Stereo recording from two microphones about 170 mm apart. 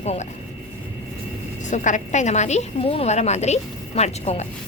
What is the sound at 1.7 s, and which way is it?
A woman's voice, 45° left (ahead or behind).